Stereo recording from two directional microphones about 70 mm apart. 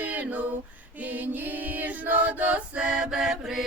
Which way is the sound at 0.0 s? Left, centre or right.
Right.